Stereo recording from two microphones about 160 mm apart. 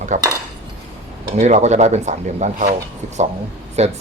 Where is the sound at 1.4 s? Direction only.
45° right (ahead or behind).